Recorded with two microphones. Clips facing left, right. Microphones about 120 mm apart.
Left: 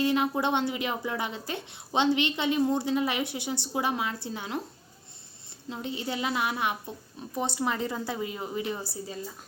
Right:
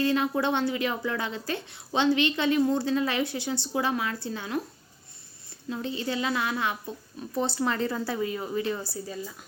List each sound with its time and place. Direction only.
0.0 s speech: 20° left (ahead or behind)
5.6 s speech: 20° left (ahead or behind)